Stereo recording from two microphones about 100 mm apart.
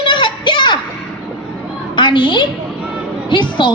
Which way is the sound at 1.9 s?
55° left (ahead or behind).